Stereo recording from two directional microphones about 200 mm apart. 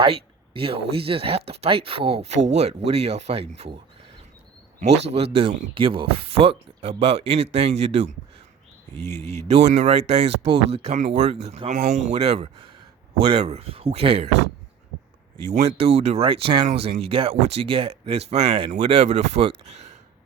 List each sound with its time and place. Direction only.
0.0 s a sound: 30° right (ahead or behind)
0.9 s speech: 30° right (ahead or behind)
4.8 s speech: 35° right (ahead or behind)
15.4 s speech: 35° right (ahead or behind)